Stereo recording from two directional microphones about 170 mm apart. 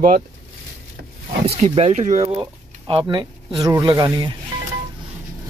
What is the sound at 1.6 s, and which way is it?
Speech, 40° right (ahead or behind).